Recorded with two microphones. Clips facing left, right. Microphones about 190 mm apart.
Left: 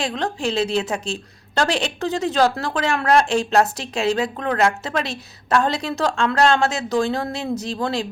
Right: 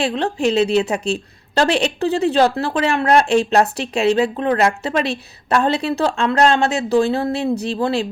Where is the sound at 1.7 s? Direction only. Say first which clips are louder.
Right 5 dB; 35° right (ahead or behind).